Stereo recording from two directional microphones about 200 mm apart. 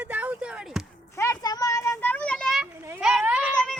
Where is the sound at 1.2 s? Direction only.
15° left (ahead or behind); by 2.7 s centre (ahead or behind).